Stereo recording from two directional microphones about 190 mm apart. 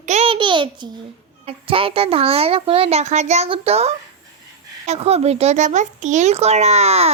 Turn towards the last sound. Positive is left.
turn(degrees=-35)  # may be behind; listen again after turning